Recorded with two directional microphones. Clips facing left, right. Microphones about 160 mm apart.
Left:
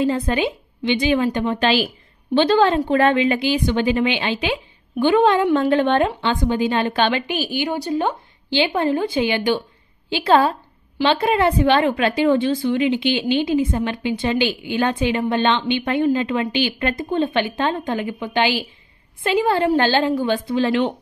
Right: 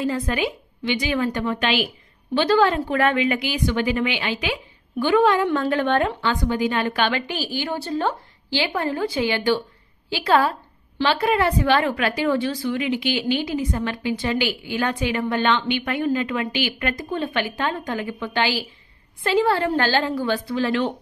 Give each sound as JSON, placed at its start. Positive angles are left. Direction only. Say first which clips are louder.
{"t": 0.0, "sound": "a woman's voice", "louder": "left 4 dB", "side_deg": 25}